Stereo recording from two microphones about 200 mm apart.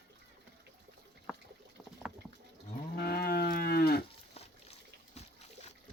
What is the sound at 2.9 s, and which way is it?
Moo, 50° left (ahead or behind).